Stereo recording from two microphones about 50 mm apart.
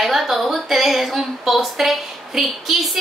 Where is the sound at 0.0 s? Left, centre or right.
Centre.